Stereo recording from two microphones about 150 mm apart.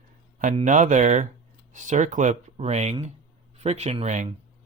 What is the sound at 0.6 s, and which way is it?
Speech, 55° right (ahead or behind).